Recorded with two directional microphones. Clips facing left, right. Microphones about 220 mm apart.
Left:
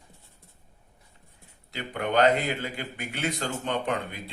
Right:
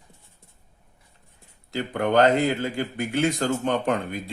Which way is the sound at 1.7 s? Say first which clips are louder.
Right 6 dB; 45° right (ahead or behind).